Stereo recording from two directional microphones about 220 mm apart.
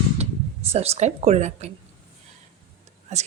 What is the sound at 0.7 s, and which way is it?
Speech, 30° right (ahead or behind).